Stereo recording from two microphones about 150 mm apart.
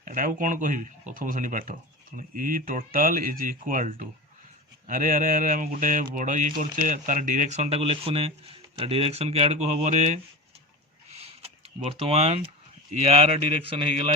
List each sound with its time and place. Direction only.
0.0 s speech: 65° right (ahead or behind)
11.1 s a sound: 45° right (ahead or behind)
12.0 s speech: 40° right (ahead or behind)